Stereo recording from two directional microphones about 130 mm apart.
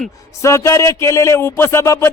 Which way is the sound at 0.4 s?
25° left (ahead or behind).